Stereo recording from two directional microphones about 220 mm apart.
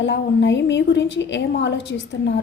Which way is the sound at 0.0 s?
55° left (ahead or behind).